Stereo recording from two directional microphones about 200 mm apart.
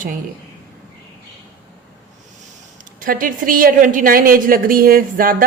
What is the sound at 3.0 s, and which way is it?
A woman's voice, 45° right (ahead or behind).